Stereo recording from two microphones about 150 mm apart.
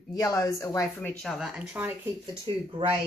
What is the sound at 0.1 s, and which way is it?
Speech, 25° left (ahead or behind).